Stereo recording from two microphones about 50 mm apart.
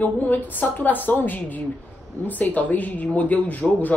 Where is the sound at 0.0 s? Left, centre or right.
Left.